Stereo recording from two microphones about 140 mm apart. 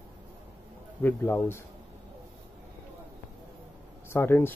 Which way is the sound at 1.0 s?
15° left (ahead or behind).